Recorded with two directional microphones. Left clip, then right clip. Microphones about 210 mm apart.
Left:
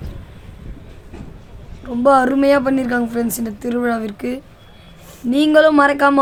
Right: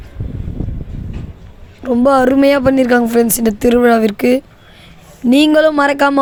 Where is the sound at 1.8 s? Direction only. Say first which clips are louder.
Right 2 dB; 30° right (ahead or behind).